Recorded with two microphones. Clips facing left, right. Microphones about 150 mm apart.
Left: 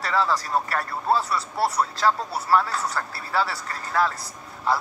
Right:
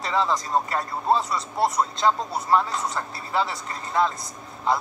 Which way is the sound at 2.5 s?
20° right (ahead or behind).